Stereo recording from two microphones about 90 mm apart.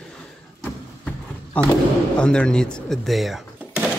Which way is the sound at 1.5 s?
15° left (ahead or behind).